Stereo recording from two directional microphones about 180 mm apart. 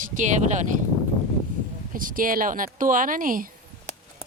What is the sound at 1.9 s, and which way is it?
Speech, 50° right (ahead or behind).